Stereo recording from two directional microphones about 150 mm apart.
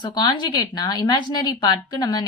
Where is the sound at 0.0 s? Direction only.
30° left (ahead or behind).